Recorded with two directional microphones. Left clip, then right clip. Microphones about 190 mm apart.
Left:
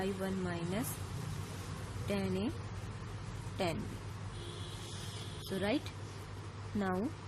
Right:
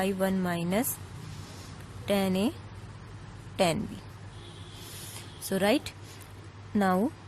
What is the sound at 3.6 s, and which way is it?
Speech, 50° right (ahead or behind).